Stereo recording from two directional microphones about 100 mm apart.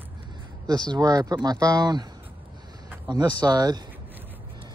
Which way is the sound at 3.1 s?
40° right (ahead or behind).